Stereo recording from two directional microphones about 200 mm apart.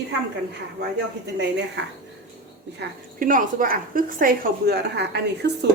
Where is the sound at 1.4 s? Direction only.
60° right (ahead or behind).